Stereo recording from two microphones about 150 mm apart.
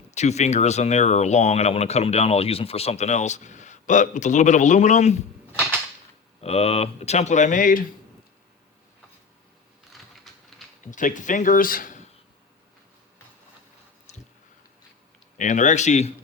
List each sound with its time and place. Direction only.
0.1 s speech: 50° left (ahead or behind)
6.4 s speech: 45° left (ahead or behind); by 7.9 s 65° left (ahead or behind)
9.9 s typing: centre (ahead or behind)
10.9 s speech: 60° left (ahead or behind)
14.1 s a sound: 50° left (ahead or behind)
15.4 s speech: 55° left (ahead or behind)